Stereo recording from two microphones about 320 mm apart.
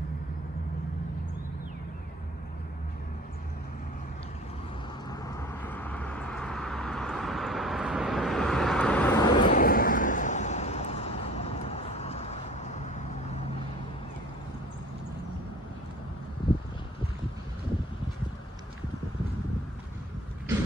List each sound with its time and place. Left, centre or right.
5.1 s vehicle: centre
9.5 s vehicle: left